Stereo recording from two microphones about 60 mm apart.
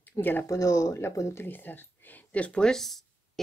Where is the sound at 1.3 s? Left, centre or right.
Left.